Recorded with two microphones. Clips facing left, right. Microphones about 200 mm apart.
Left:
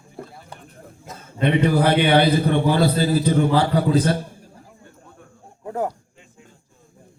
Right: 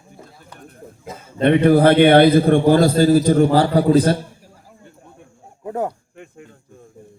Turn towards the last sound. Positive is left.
turn(degrees=-60)  # may be behind; listen again after turning